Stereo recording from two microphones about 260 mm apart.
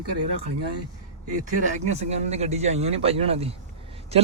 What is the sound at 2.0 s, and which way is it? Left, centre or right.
A man's voice, right.